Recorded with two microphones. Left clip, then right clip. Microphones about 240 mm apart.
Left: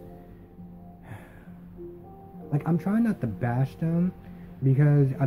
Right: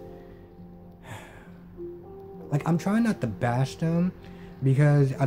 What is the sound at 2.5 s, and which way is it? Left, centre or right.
Speech, centre.